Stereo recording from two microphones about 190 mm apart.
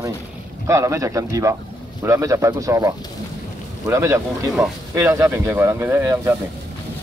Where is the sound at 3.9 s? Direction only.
15° right (ahead or behind).